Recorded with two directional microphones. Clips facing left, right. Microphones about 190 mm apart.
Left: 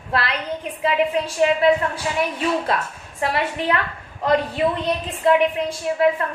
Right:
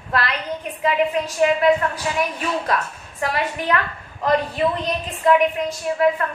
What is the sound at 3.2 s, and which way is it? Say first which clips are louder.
Speech: left 1 dB; 30° left (ahead or behind).